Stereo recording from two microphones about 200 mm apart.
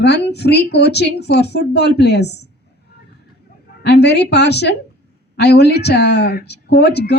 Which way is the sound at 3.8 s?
55° left (ahead or behind).